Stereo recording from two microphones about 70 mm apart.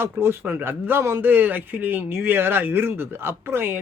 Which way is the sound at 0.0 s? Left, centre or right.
Right.